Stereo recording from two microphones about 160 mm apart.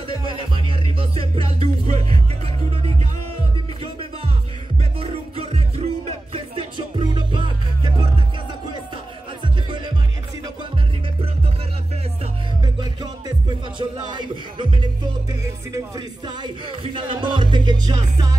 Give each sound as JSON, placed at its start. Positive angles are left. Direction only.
{"t": 0.2, "sound": "music", "side_deg": -30}
{"t": 5.0, "sound": "music", "side_deg": -40}
{"t": 9.4, "sound": "music", "side_deg": -30}
{"t": 12.6, "sound": "music", "side_deg": -25}
{"t": 16.3, "sound": "music", "side_deg": -30}